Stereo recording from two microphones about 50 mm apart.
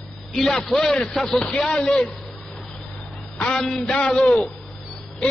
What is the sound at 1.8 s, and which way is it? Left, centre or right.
Speech, centre.